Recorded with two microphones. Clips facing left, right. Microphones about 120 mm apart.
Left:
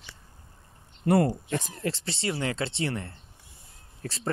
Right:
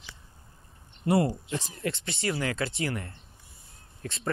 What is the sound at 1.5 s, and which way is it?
Speech, 50° left (ahead or behind).